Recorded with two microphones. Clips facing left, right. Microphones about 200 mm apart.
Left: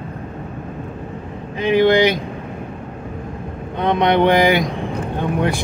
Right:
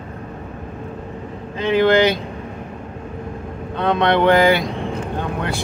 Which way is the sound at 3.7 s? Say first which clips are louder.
Left 1 dB; 15° left (ahead or behind).